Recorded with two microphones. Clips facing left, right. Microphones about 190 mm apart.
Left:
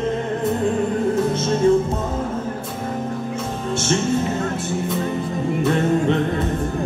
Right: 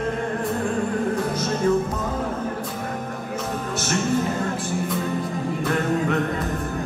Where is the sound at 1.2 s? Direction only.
25° left (ahead or behind).